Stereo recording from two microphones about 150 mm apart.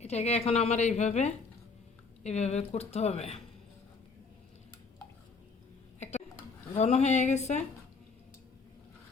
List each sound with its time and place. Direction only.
0.0 s a woman's voice: 45° left (ahead or behind)
6.0 s a sound: 50° left (ahead or behind)
6.7 s a woman's voice: 50° left (ahead or behind)